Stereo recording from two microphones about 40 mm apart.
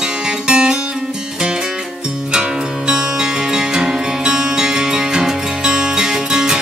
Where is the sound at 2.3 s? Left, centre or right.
Centre.